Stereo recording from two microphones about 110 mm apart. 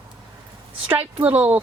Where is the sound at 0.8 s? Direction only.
15° right (ahead or behind).